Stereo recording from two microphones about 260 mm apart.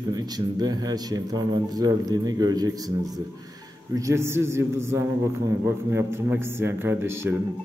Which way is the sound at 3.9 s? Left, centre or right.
Centre.